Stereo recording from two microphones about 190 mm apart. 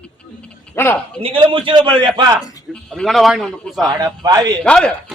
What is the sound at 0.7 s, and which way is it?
Speech, 10° left (ahead or behind).